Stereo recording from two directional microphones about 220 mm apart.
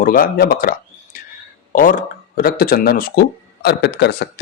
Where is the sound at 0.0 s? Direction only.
40° left (ahead or behind).